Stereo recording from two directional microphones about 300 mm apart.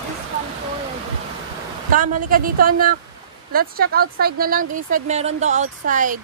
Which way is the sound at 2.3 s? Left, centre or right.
Right.